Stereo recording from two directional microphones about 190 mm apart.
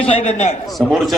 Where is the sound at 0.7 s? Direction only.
Centre (ahead or behind).